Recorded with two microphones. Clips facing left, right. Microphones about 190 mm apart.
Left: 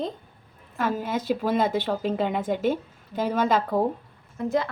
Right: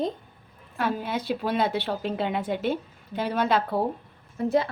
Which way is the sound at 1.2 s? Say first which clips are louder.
Left 3 dB; 45° left (ahead or behind).